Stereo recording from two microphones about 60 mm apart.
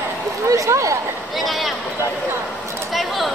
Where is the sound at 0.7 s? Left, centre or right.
Right.